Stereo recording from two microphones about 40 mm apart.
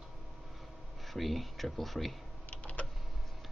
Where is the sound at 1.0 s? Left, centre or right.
Centre.